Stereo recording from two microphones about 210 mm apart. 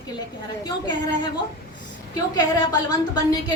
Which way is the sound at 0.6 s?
20° left (ahead or behind).